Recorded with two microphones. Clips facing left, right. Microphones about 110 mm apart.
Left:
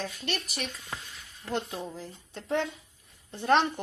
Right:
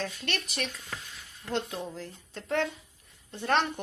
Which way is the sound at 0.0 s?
5° left (ahead or behind).